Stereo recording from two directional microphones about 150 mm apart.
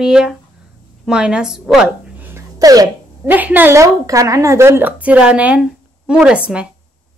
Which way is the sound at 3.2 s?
10° right (ahead or behind).